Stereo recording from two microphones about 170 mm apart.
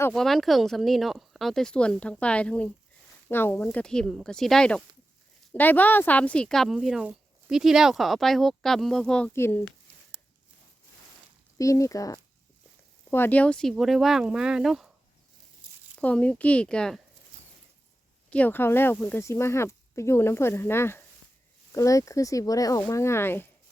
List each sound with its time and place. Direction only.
0.1 s speech: centre (ahead or behind)
11.5 s speech: 20° left (ahead or behind); by 14.8 s centre (ahead or behind)
15.6 s a sound: 30° right (ahead or behind)
16.0 s speech: 10° left (ahead or behind)
18.3 s speech: 10° left (ahead or behind)